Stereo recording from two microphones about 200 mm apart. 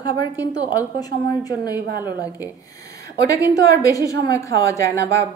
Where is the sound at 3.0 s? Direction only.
15° left (ahead or behind).